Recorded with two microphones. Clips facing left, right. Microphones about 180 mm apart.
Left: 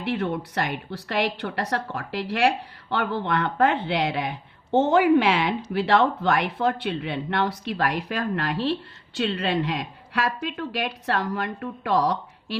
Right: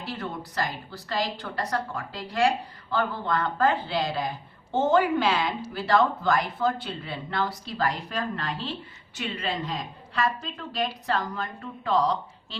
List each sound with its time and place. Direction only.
0.0 s a woman's voice: 65° left (ahead or behind)